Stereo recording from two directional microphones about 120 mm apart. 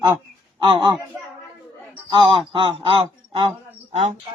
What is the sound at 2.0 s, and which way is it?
Speech, 40° right (ahead or behind).